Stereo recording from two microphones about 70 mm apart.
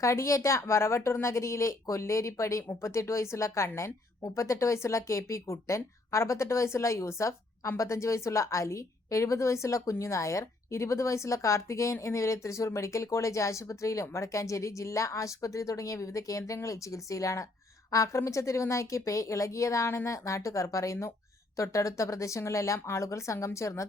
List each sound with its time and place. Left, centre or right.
0.0 s a woman's voice: left